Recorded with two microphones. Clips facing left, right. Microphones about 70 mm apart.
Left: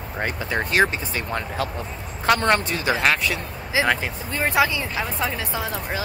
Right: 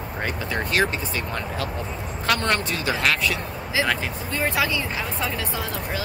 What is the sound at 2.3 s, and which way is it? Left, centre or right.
Speech, left.